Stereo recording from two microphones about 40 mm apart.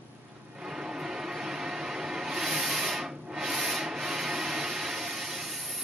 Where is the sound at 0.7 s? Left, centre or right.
Centre.